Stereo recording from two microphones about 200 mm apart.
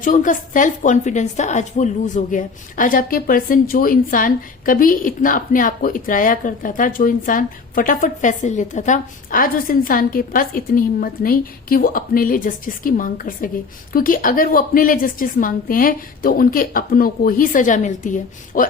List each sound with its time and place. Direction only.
0.0 s a woman's voice: 40° left (ahead or behind)